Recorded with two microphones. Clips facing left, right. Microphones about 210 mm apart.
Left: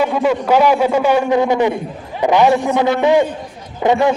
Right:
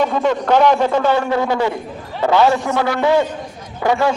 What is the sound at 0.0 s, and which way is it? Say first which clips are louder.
A man's voice: left 1 dB; 5° left (ahead or behind).